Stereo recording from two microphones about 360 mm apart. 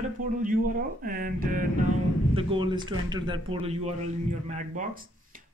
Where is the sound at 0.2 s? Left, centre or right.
Right.